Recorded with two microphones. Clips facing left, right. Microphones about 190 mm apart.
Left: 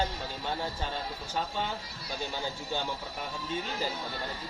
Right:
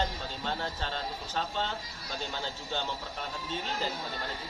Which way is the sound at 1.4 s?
10° left (ahead or behind).